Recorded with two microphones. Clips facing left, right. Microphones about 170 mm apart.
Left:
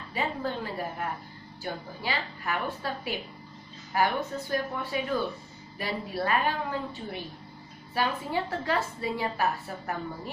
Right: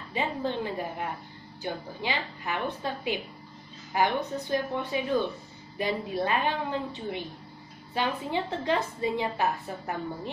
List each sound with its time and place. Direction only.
0.1 s a woman's voice: 20° right (ahead or behind)